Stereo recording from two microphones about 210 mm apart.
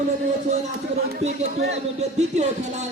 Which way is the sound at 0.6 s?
35° right (ahead or behind).